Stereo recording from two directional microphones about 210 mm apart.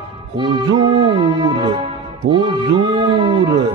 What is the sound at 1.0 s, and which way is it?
Music, 25° right (ahead or behind).